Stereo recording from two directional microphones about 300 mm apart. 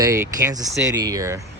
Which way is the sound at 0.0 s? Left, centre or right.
Centre.